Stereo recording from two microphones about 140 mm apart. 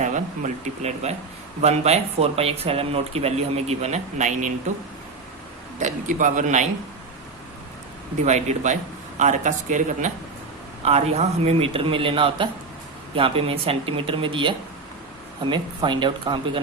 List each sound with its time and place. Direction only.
0.0 s speech: 60° right (ahead or behind)
5.8 s speech: 65° right (ahead or behind)
8.2 s speech: 55° right (ahead or behind)
10.8 s speech: 50° right (ahead or behind)